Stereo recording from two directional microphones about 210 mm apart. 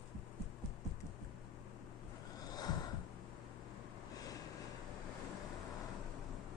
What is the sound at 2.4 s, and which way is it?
Snort, 20° left (ahead or behind).